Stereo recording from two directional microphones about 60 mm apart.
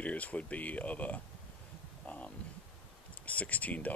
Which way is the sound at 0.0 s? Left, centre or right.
Left.